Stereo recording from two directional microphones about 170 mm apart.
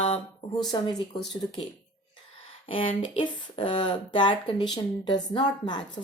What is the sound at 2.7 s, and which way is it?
A woman's voice, 30° left (ahead or behind).